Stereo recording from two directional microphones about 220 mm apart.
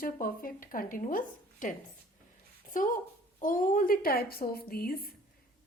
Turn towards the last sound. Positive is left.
turn(degrees=45)  # may be behind; listen again after turning